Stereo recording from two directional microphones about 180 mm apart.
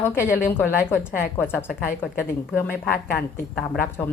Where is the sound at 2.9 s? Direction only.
50° left (ahead or behind).